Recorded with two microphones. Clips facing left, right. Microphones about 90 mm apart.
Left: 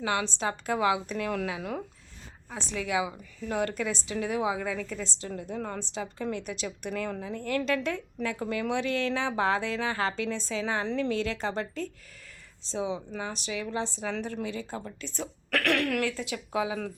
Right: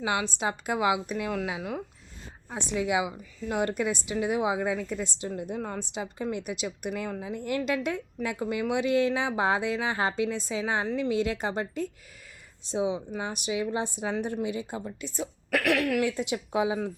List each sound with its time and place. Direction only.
0.0 s a woman's voice: 15° right (ahead or behind)
2.5 s a woman's voice: 20° right (ahead or behind)
16.0 s a woman's voice: 20° right (ahead or behind)